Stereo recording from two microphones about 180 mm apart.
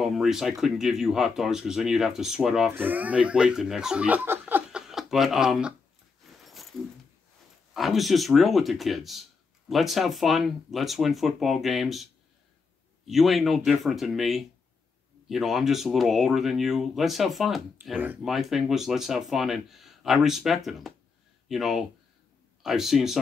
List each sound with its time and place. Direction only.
0.0 s speech: centre (ahead or behind)
6.4 s a sound: centre (ahead or behind)
7.7 s speech: centre (ahead or behind)